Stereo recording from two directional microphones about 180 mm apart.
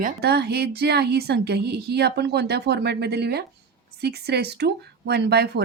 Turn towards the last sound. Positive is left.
turn(degrees=-60)  # may be behind; listen again after turning